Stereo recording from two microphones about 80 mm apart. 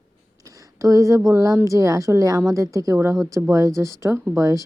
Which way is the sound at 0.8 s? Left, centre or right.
Right.